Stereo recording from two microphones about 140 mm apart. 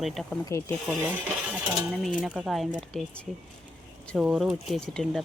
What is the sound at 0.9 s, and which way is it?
Cutlery, 10° right (ahead or behind).